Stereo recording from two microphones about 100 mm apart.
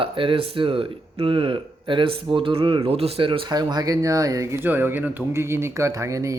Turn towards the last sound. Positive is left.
turn(degrees=-30)  # may be behind; listen again after turning